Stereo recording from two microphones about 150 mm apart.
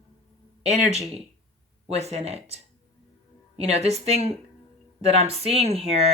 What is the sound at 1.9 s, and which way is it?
Speech, 45° right (ahead or behind).